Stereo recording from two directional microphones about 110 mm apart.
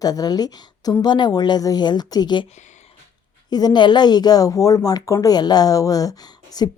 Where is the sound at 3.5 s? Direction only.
40° left (ahead or behind).